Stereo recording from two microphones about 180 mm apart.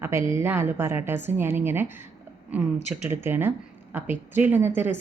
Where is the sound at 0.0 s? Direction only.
15° right (ahead or behind).